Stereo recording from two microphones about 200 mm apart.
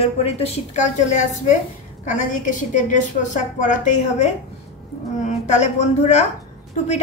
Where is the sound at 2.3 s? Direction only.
40° left (ahead or behind).